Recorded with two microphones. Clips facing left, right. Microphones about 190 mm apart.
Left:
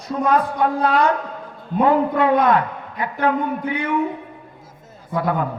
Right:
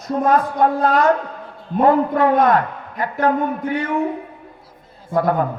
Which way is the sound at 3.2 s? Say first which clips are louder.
Right 2 dB; 45° right (ahead or behind).